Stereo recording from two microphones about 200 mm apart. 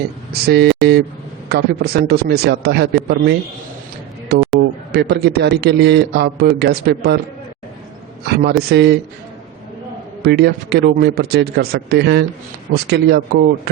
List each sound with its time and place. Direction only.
0.4 s a man's voice: 55° right (ahead or behind)
8.3 s a man's voice: 55° right (ahead or behind)
10.2 s a man's voice: 55° right (ahead or behind)